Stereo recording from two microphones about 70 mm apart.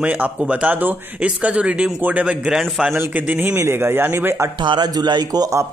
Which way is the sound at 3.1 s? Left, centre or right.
Right.